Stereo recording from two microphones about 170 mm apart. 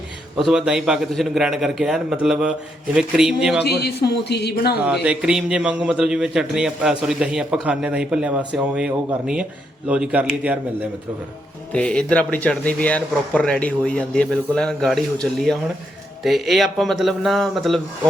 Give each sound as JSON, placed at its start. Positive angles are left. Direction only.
{"t": 0.3, "sound": "a man's voice", "side_deg": -5}
{"t": 3.6, "sound": "a man's voice", "side_deg": 75}
{"t": 5.0, "sound": "a man's voice", "side_deg": -5}
{"t": 11.7, "sound": "a man's voice", "side_deg": 5}